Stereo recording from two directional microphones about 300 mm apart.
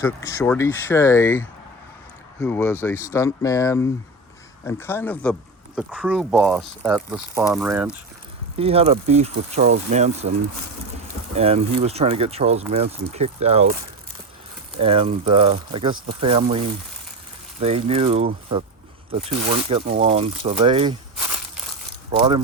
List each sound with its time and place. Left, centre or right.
0.0 s speech: centre
8.5 s speech: centre
11.3 s speech: right
14.8 s speech: centre